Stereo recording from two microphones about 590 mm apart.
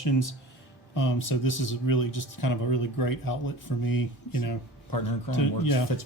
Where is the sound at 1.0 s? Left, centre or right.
Left.